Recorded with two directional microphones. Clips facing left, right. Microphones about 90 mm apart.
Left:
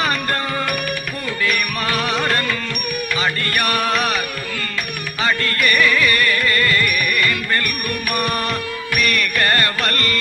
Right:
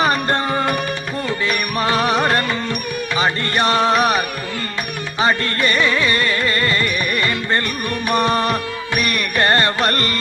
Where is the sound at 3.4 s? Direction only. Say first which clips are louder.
Right 4 dB; 25° right (ahead or behind).